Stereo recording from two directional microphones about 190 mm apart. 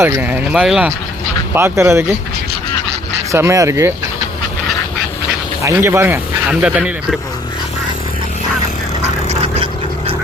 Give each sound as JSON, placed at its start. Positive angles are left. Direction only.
{"t": 0.0, "sound": "speech", "side_deg": -10}
{"t": 3.3, "sound": "speech", "side_deg": -15}
{"t": 5.6, "sound": "speech", "side_deg": -15}
{"t": 9.0, "sound": "duck", "side_deg": -35}